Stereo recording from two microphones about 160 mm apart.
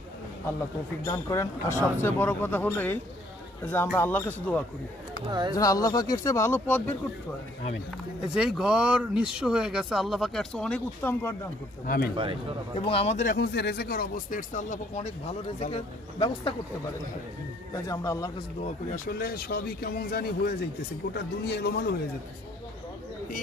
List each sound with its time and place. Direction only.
1.0 s speech: 20° left (ahead or behind)
5.3 s speech: 30° right (ahead or behind)
5.5 s speech: 20° left (ahead or behind)
8.4 s speech: 5° right (ahead or behind); by 11.3 s 15° left (ahead or behind)
11.9 s speech: 70° left (ahead or behind)
12.8 s speech: 35° left (ahead or behind)
13.3 s speech: 90° left; by 15.1 s 45° left (ahead or behind)
15.6 s speech: 35° left (ahead or behind)
17.8 s speech: 20° left (ahead or behind)
18.9 s speech: 70° left (ahead or behind)
21.1 s a man's voice: 90° left